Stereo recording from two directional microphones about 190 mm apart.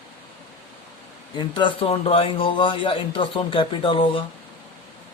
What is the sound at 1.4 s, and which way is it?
A man's voice, 25° left (ahead or behind).